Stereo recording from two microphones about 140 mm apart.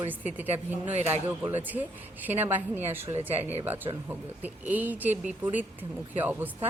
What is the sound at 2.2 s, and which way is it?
Speech, 15° right (ahead or behind).